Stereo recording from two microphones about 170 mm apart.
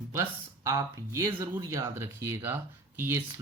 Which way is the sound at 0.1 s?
15° right (ahead or behind).